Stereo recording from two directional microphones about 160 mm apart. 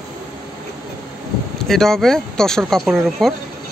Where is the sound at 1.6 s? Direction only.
Centre (ahead or behind).